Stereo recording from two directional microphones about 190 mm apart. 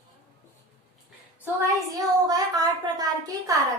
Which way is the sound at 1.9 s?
20° right (ahead or behind).